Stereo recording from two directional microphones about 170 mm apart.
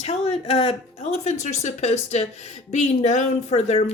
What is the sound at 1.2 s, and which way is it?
A woman's voice, 45° left (ahead or behind).